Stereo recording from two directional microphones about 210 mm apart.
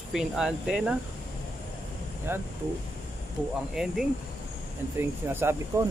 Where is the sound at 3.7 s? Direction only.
Centre (ahead or behind).